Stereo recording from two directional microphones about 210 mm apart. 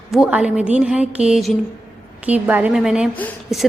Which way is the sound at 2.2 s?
5° right (ahead or behind).